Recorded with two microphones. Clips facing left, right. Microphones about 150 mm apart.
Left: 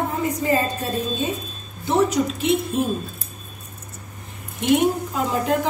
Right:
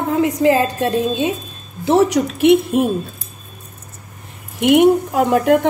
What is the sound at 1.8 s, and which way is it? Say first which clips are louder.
A woman's voice: right 5 dB; 75° right (ahead or behind).